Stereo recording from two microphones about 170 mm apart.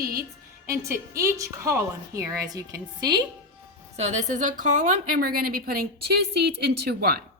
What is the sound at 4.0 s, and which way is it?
A woman's voice, 45° right (ahead or behind).